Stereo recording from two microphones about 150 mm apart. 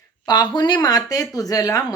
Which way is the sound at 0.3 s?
30° left (ahead or behind).